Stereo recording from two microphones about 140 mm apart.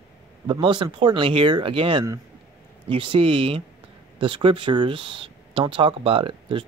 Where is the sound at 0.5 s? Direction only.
35° right (ahead or behind).